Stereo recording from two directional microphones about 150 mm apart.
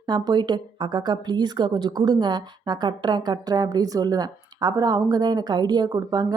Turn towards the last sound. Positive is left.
turn(degrees=-25)  # may be behind; listen again after turning